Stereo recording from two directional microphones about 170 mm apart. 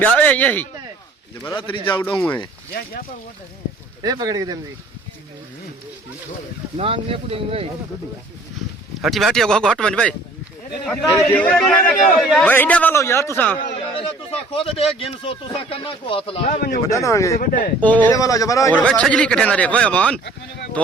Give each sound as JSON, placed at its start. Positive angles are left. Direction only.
{"t": 0.0, "sound": "a man's voice", "side_deg": 10}
{"t": 1.6, "sound": "speech", "side_deg": 30}
{"t": 2.0, "sound": "a man's voice", "side_deg": 10}
{"t": 4.0, "sound": "speech", "side_deg": -20}
{"t": 6.7, "sound": "speech", "side_deg": -35}
{"t": 9.0, "sound": "a man's voice", "side_deg": 0}
{"t": 13.9, "sound": "speech", "side_deg": 35}
{"t": 16.9, "sound": "a man's voice", "side_deg": 20}
{"t": 17.4, "sound": "speech", "side_deg": 50}
{"t": 17.7, "sound": "a man's voice", "side_deg": 10}
{"t": 18.1, "sound": "speech", "side_deg": 20}
{"t": 18.7, "sound": "a man's voice", "side_deg": 5}